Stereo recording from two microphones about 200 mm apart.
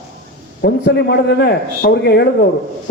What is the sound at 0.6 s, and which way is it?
Speech, 55° left (ahead or behind).